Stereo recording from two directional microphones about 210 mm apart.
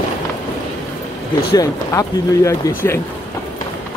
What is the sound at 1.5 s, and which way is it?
Speech, 15° left (ahead or behind).